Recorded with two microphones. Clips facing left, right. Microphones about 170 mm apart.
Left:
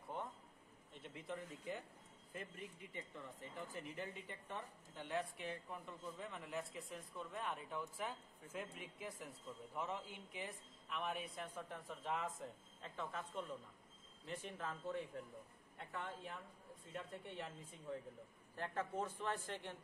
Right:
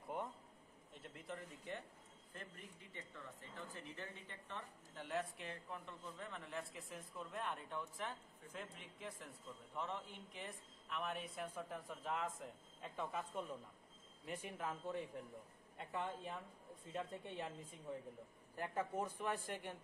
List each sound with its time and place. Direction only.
1.0 s a man's voice: centre (ahead or behind)
2.3 s speech: 10° left (ahead or behind)
4.9 s a man's voice: centre (ahead or behind)